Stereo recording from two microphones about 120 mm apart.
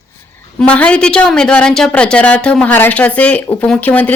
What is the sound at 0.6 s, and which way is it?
A woman's voice, 10° left (ahead or behind).